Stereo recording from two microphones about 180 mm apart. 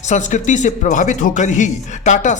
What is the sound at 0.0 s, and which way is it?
Speech, 40° left (ahead or behind).